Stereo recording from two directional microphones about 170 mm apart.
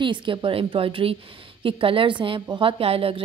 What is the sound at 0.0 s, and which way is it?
A woman's voice, 30° right (ahead or behind).